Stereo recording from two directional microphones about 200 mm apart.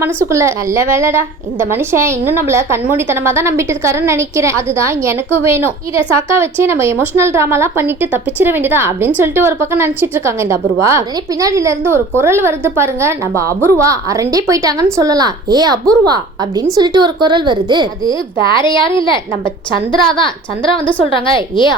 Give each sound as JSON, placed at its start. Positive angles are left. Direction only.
{"t": 0.0, "sound": "a woman's voice", "side_deg": -15}
{"t": 18.4, "sound": "a woman's voice", "side_deg": 25}